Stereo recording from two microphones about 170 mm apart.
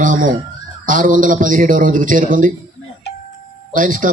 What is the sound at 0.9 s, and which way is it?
A man's voice, 50° right (ahead or behind).